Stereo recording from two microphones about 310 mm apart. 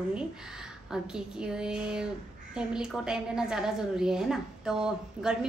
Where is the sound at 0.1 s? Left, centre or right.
Centre.